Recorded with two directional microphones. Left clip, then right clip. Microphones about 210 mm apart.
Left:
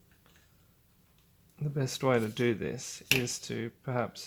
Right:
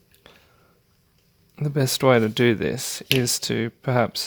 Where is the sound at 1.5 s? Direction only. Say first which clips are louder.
Right 12 dB; 45° right (ahead or behind).